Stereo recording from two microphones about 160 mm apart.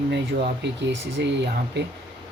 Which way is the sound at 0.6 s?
90° right.